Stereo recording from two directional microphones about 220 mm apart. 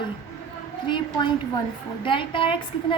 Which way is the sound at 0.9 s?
20° left (ahead or behind).